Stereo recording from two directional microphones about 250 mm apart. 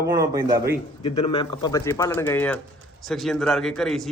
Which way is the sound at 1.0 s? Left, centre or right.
Centre.